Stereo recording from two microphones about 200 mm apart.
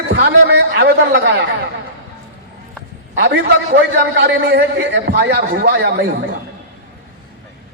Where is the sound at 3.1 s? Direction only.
55° right (ahead or behind).